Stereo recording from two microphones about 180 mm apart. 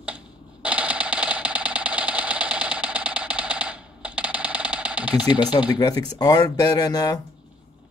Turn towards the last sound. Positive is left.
turn(degrees=20)  # may be behind; listen again after turning